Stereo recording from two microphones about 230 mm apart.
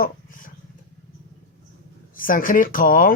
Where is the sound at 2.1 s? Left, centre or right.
Left.